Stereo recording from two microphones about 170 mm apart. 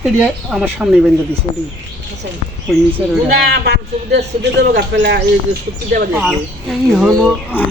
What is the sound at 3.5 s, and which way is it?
Speech, 75° right (ahead or behind).